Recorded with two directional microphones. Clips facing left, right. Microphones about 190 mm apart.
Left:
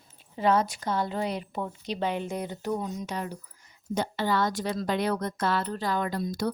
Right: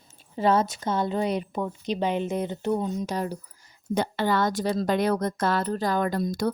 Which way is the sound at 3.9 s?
60° right (ahead or behind).